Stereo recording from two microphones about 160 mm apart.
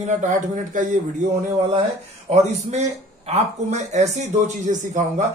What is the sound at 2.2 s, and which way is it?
Speech, 45° right (ahead or behind).